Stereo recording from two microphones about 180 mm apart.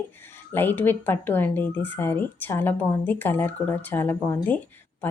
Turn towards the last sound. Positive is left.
turn(degrees=10)  # may be behind; listen again after turning